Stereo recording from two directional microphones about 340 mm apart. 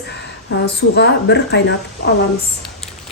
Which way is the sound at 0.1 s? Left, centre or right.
Left.